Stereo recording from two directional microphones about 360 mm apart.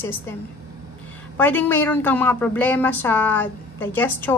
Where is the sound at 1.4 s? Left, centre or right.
Centre.